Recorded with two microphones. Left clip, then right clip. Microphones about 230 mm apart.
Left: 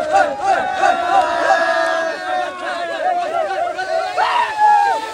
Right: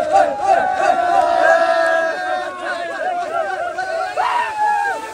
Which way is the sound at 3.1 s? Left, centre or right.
Left.